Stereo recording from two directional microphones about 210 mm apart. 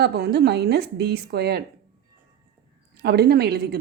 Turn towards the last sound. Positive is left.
turn(degrees=-50)  # may be behind; listen again after turning